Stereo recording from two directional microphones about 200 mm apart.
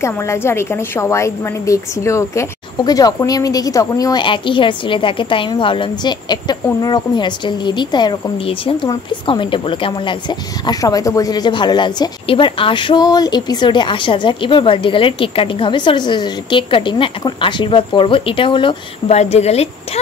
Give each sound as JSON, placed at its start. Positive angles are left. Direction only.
{"t": 0.0, "sound": "a woman's voice", "side_deg": 15}